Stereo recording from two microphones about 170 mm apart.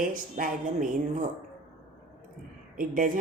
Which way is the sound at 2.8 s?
55° right (ahead or behind).